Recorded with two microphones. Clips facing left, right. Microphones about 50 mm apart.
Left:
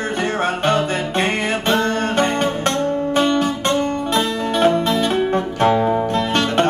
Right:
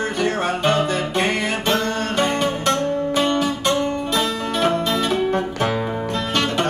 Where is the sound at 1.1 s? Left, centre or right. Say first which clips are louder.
Left 3 dB; left.